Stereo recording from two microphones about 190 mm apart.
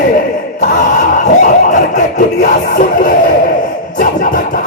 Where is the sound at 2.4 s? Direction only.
45° left (ahead or behind).